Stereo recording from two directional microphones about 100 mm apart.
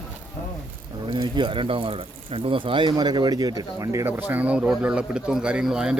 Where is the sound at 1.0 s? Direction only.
55° right (ahead or behind).